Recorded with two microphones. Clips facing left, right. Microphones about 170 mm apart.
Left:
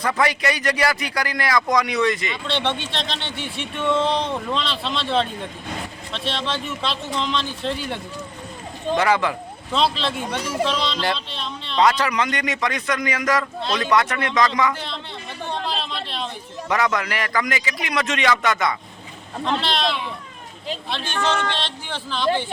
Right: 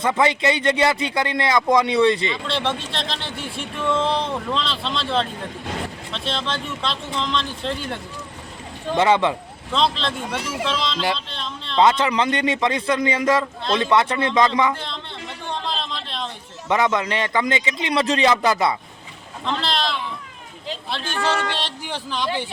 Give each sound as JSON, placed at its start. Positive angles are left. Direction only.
{"t": 0.0, "sound": "speech", "side_deg": -25}
{"t": 2.5, "sound": "speech", "side_deg": 0}
{"t": 9.0, "sound": "speech", "side_deg": -25}
{"t": 9.7, "sound": "speech", "side_deg": 5}
{"t": 10.4, "sound": "a man's voice", "side_deg": 40}
{"t": 10.7, "sound": "a man's voice", "side_deg": 0}
{"t": 11.8, "sound": "speech", "side_deg": -25}
{"t": 15.4, "sound": "a sound", "side_deg": 5}
{"t": 16.6, "sound": "speech", "side_deg": -25}
{"t": 19.5, "sound": "speech", "side_deg": 0}
{"t": 21.2, "sound": "speech", "side_deg": -10}